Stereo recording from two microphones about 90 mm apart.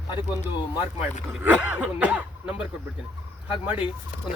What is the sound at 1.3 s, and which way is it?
Speech, 15° right (ahead or behind).